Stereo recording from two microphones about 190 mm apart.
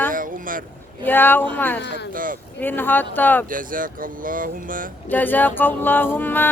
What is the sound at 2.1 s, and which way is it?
Speech, 45° right (ahead or behind).